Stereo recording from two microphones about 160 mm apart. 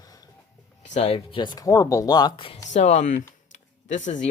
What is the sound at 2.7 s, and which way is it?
Speech, 45° left (ahead or behind).